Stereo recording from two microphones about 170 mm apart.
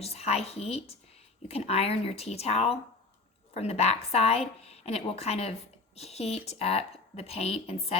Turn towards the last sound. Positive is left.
turn(degrees=35)  # may be behind; listen again after turning